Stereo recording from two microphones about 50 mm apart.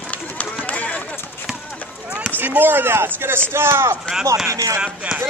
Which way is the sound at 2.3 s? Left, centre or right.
Right.